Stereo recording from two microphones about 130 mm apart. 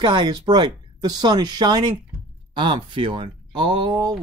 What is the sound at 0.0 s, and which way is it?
Speech, 35° right (ahead or behind).